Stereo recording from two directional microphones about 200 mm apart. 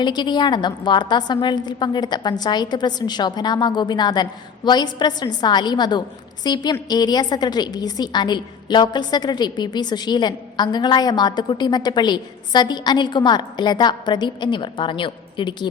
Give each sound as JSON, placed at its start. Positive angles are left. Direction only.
{"t": 0.0, "sound": "a woman's voice", "side_deg": 20}